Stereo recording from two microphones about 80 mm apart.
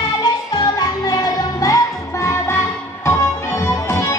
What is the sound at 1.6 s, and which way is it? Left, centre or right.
Music, left.